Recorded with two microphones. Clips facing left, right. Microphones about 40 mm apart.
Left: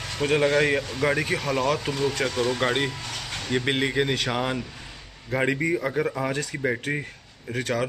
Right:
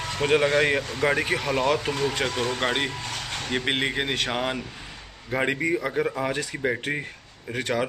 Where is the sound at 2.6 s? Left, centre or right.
Centre.